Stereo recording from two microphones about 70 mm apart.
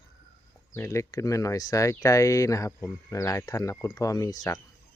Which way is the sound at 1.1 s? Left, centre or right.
Left.